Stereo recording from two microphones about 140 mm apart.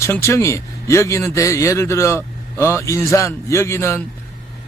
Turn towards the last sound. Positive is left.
turn(degrees=20)  # may be behind; listen again after turning